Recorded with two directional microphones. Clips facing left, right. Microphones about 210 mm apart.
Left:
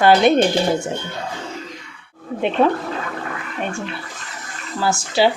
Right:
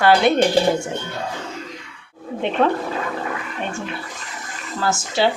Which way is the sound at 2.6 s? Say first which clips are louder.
Left 2 dB; 5° left (ahead or behind).